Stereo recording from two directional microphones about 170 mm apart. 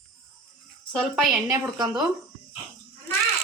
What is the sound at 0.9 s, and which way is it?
Speech, centre (ahead or behind).